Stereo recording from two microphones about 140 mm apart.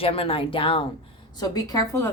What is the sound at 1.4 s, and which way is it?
Speech, 25° left (ahead or behind).